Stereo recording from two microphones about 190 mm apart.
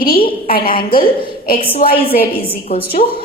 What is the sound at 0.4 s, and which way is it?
Speech, 50° left (ahead or behind).